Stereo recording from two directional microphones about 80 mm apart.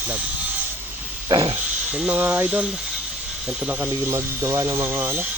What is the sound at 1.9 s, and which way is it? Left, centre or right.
Speech, centre.